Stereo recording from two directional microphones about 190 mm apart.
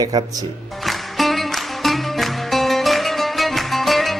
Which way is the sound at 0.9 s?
Centre (ahead or behind).